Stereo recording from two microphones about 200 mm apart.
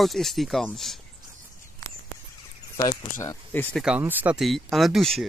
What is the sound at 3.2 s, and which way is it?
Speech, 10° left (ahead or behind).